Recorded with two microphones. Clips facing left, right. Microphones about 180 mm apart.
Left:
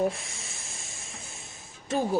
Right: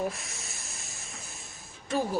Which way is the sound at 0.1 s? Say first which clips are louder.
Left 2 dB; 25° left (ahead or behind).